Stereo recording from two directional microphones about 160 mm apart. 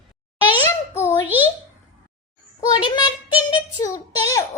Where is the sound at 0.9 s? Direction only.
15° left (ahead or behind).